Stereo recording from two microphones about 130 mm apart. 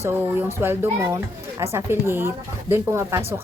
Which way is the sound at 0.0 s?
20° right (ahead or behind).